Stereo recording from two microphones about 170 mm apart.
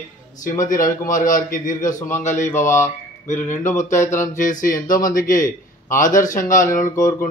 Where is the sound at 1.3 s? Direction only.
50° left (ahead or behind).